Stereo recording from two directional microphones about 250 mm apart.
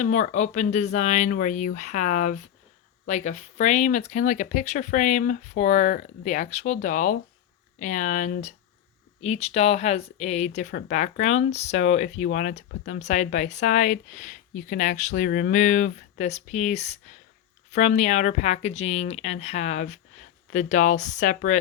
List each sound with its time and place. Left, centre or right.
0.0 s speech: left